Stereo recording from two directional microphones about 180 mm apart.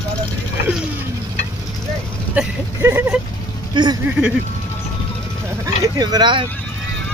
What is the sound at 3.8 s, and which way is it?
Speech, 25° right (ahead or behind).